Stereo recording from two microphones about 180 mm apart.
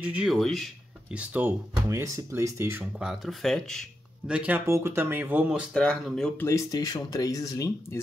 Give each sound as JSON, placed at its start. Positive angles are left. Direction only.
{"t": 0.0, "sound": "speech", "side_deg": -5}
{"t": 2.8, "sound": "speech", "side_deg": 0}
{"t": 6.4, "sound": "speech", "side_deg": 20}